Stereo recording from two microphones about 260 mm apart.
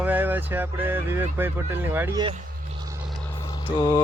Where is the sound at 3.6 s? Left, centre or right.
Centre.